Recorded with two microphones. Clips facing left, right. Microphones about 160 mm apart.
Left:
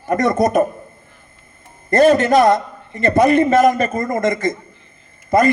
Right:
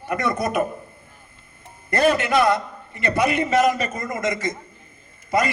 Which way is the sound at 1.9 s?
45° left (ahead or behind).